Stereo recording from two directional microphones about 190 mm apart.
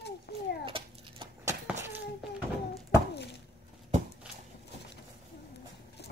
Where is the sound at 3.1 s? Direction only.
65° left (ahead or behind).